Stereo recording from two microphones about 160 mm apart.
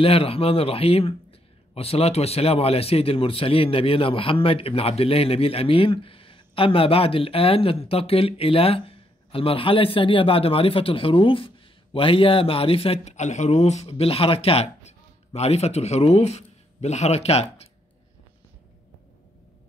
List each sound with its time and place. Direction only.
0.0 s a man's voice: 35° left (ahead or behind)